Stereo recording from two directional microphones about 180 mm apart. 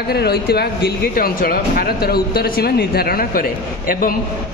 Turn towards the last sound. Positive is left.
turn(degrees=55)  # may be behind; listen again after turning